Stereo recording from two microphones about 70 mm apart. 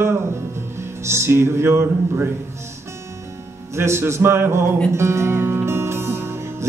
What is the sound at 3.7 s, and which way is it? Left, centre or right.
Music, right.